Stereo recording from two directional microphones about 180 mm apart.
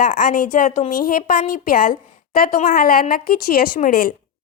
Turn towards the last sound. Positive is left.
turn(degrees=55)  # may be behind; listen again after turning